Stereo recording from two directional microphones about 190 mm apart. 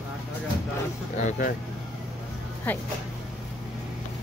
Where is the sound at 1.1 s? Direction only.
40° left (ahead or behind).